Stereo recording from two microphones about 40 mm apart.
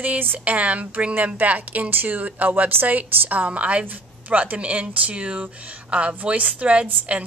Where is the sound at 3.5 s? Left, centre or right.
Right.